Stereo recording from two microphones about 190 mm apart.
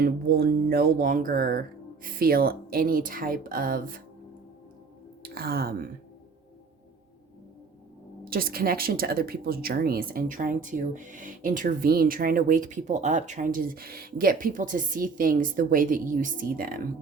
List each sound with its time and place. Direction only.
0.0 s speech: 55° right (ahead or behind)
5.2 s speech: 55° right (ahead or behind)
8.2 s speech: 50° right (ahead or behind)